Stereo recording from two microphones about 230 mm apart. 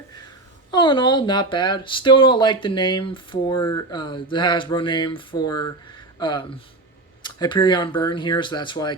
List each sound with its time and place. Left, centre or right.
0.7 s speech: centre